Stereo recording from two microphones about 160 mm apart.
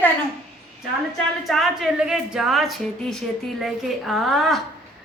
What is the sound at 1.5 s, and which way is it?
A woman's voice, centre (ahead or behind).